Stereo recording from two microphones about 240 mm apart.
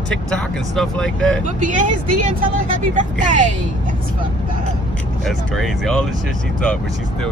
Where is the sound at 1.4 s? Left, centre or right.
Right.